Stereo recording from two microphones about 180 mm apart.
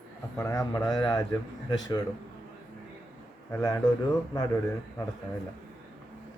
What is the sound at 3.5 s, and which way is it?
Speech, 15° left (ahead or behind).